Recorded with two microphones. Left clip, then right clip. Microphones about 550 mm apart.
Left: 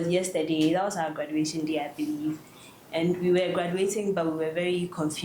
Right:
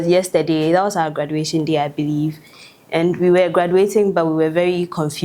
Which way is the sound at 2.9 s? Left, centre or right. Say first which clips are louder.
Right 10 dB; right.